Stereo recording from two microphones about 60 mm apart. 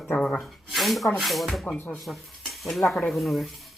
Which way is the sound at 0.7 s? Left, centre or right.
Centre.